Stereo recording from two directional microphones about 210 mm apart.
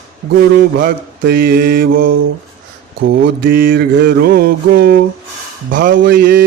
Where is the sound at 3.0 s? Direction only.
60° right (ahead or behind).